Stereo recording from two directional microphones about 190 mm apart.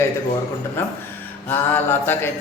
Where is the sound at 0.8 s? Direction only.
10° left (ahead or behind).